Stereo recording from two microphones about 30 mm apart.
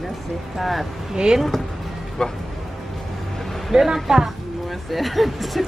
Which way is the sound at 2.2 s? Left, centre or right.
Left.